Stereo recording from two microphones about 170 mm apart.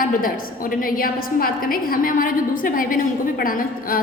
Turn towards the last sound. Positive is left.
turn(degrees=55)  # may be behind; listen again after turning